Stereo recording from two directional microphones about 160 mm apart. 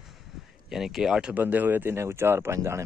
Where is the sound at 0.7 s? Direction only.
5° right (ahead or behind).